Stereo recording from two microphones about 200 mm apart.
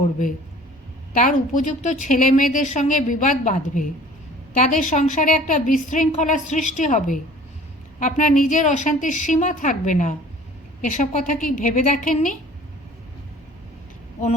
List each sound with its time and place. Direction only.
1.1 s a woman's voice: 40° left (ahead or behind)